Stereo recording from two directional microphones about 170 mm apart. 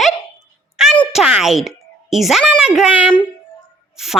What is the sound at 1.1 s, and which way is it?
Speech, 5° right (ahead or behind).